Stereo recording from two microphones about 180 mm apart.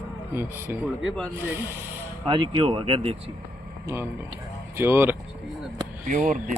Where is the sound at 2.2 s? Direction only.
25° right (ahead or behind).